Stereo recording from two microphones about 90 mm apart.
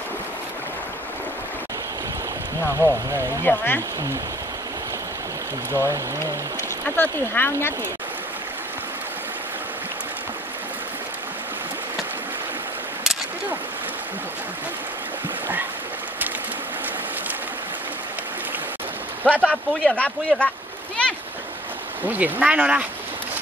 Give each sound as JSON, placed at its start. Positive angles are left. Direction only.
{"t": 2.6, "sound": "speech", "side_deg": 35}
{"t": 7.0, "sound": "speech", "side_deg": 25}
{"t": 19.2, "sound": "speech", "side_deg": 15}
{"t": 22.0, "sound": "speech", "side_deg": -20}